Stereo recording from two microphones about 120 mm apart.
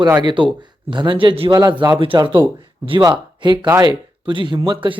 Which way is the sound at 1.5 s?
35° right (ahead or behind).